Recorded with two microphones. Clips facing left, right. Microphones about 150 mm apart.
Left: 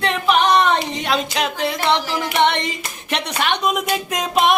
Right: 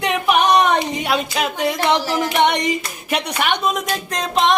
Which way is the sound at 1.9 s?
20° right (ahead or behind).